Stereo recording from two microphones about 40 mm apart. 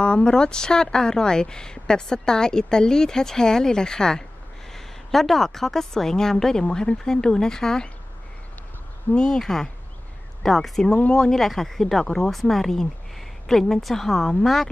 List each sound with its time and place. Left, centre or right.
0.0 s speech: left
9.1 s speech: centre
10.4 s speech: centre